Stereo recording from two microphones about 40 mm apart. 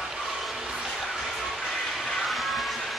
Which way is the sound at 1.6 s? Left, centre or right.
Centre.